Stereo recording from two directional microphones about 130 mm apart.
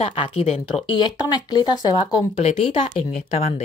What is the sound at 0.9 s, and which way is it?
Speech, 35° left (ahead or behind).